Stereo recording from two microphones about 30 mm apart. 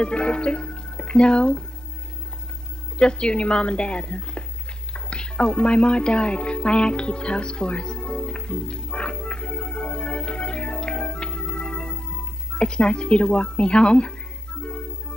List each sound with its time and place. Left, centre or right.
0.0 s speech: left
3.0 s a woman's voice: left
4.9 s music: left